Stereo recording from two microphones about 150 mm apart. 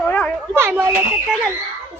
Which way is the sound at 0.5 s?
15° right (ahead or behind).